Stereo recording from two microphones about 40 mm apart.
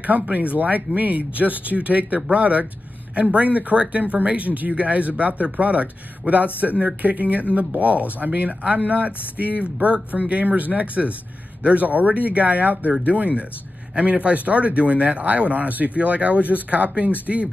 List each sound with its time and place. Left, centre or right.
0.0 s speech: right